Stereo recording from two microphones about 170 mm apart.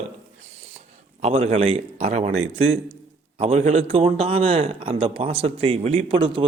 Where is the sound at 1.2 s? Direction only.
35° right (ahead or behind).